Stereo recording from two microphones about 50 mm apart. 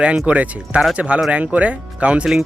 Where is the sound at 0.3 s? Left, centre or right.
Right.